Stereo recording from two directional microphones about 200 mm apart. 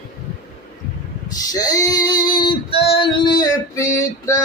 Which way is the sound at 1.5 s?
20° left (ahead or behind).